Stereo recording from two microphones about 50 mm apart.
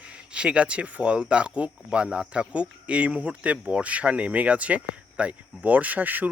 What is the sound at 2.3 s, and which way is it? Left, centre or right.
Speech, right.